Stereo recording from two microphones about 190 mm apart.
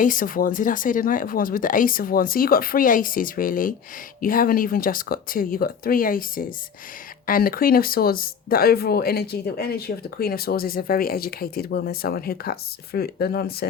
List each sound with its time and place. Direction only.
0.0 s speech: 45° left (ahead or behind)